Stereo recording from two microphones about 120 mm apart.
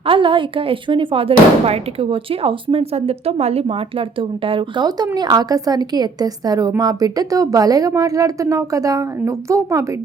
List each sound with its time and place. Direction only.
0.0 s speech: 45° right (ahead or behind)
4.9 s a woman's voice: 35° right (ahead or behind)